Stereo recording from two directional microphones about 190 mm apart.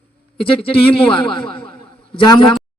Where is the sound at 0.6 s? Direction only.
30° left (ahead or behind).